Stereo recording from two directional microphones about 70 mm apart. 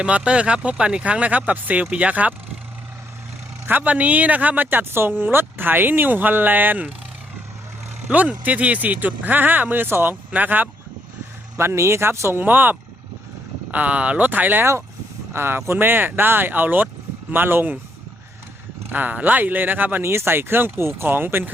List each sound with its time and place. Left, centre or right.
0.0 s speech: centre
3.7 s speech: right
8.0 s speech: right
11.5 s speech: right
12.4 s speech: right
14.6 s speech: right
18.9 s speech: right